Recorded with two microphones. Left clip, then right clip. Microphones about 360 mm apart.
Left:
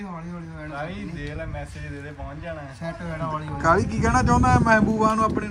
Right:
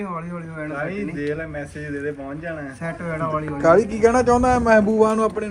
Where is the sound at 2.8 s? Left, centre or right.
Centre.